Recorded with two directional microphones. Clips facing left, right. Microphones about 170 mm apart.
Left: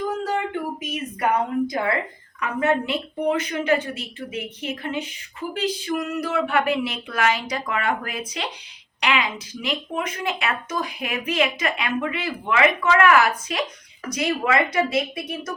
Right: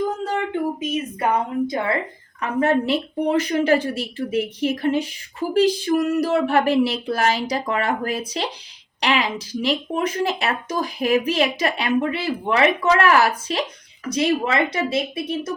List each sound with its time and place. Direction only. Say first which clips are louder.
0.8 s a woman's voice: right 3 dB; 25° right (ahead or behind)